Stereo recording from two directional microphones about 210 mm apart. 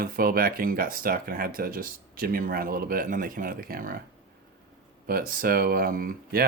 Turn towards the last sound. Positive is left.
turn(degrees=-45)  # may be behind; listen again after turning